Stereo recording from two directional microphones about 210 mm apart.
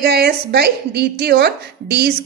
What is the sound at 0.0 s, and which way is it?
A woman's voice, 50° right (ahead or behind).